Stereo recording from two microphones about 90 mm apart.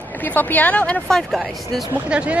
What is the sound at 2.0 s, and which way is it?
Speech, 10° right (ahead or behind).